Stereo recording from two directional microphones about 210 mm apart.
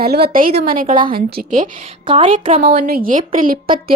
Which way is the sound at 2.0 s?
25° right (ahead or behind).